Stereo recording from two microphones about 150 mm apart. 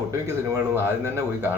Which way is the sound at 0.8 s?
15° right (ahead or behind).